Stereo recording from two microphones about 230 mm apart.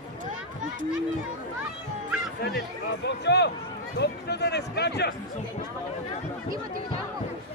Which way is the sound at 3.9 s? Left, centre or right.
Left.